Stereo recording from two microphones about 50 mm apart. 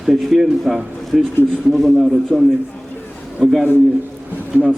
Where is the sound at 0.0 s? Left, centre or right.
Centre.